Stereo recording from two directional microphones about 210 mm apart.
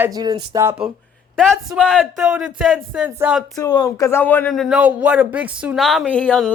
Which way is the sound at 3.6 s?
15° left (ahead or behind).